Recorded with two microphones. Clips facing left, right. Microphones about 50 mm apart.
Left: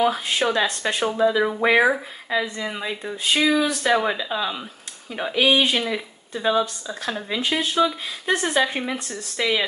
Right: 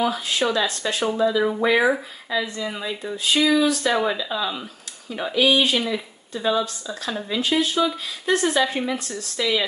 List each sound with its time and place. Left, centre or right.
0.0 s speech: left